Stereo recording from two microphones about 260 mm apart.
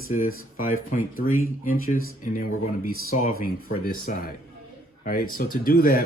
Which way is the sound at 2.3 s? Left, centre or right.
Left.